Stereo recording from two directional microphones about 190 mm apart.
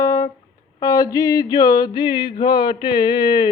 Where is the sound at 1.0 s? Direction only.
20° left (ahead or behind).